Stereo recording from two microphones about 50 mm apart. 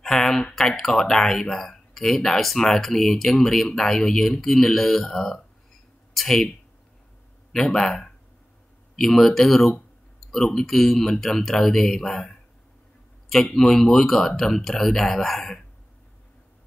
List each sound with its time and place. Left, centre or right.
0.0 s a sound: centre
0.6 s speech: centre
7.5 s speech: centre